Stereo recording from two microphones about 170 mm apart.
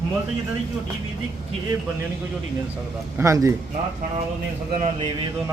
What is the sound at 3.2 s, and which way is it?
Speech, 20° right (ahead or behind).